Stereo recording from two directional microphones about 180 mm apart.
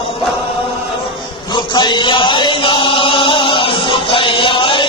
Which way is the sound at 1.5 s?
25° left (ahead or behind).